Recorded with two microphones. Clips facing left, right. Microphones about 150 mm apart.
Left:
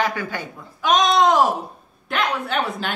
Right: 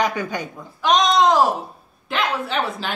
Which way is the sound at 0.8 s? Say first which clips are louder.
Even; 5° left (ahead or behind).